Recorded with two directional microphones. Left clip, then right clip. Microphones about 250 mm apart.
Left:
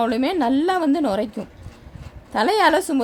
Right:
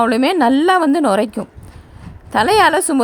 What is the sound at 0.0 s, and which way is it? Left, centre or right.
A woman's voice, right.